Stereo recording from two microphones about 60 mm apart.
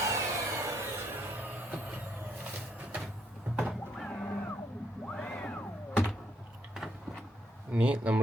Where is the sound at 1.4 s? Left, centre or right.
Right.